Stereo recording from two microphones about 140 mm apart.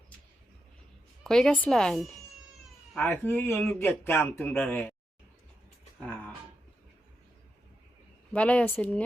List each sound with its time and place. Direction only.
1.2 s speech: 5° left (ahead or behind)
3.0 s a man's voice: 15° left (ahead or behind)
6.0 s a sound: 10° left (ahead or behind)
8.3 s a man's voice: 10° left (ahead or behind)